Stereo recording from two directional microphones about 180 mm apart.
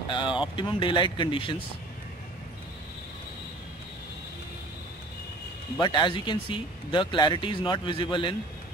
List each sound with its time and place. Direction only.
0.1 s speech: 25° left (ahead or behind)
5.8 s speech: 25° left (ahead or behind)